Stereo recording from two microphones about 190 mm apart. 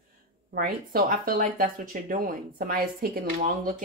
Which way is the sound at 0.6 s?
50° right (ahead or behind).